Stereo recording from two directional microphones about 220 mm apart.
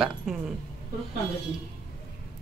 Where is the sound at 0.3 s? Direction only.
Centre (ahead or behind).